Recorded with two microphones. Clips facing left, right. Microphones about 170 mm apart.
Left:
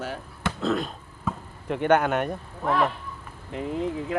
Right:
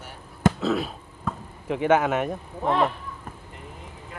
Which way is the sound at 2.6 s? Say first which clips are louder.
Right 1 dB; 20° right (ahead or behind).